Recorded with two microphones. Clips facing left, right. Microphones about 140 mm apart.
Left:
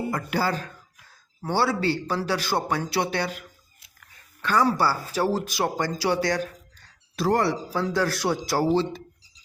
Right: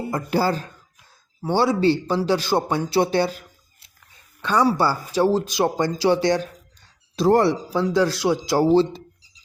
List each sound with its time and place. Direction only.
0.3 s speech: 30° right (ahead or behind)
1.4 s speech: 15° right (ahead or behind)
4.4 s a sound: 20° right (ahead or behind)
4.8 s speech: 20° right (ahead or behind)
7.7 s speech: 15° right (ahead or behind)
8.7 s speech: 30° right (ahead or behind)